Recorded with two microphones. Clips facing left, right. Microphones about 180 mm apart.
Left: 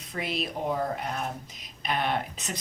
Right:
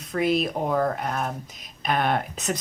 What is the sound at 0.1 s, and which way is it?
Speech, 50° right (ahead or behind).